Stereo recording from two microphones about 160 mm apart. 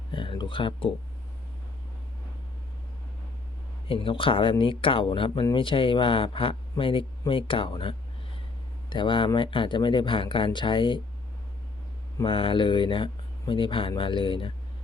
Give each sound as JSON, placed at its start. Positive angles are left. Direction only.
{"t": 0.1, "sound": "speech", "side_deg": 30}
{"t": 3.8, "sound": "speech", "side_deg": 35}
{"t": 12.1, "sound": "speech", "side_deg": 30}